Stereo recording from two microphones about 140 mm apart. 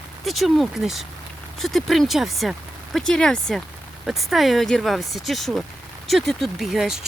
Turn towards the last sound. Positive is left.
turn(degrees=-5)  # may be behind; listen again after turning